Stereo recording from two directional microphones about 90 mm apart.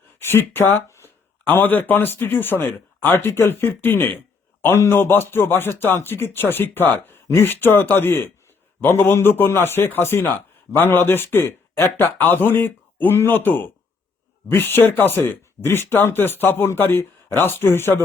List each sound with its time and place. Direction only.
0.2 s a man's voice: 25° left (ahead or behind)